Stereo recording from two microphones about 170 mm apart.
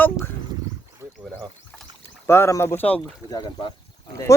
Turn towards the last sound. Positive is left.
turn(degrees=25)  # may be behind; listen again after turning